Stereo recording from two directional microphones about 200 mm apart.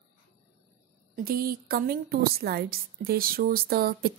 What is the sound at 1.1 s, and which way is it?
A woman's voice, 45° right (ahead or behind).